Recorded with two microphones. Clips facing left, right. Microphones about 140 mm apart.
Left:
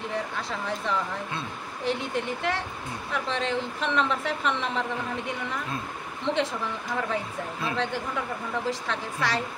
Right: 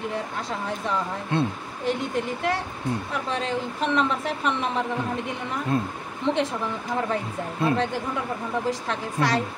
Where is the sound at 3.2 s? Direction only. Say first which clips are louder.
Even; 45° right (ahead or behind).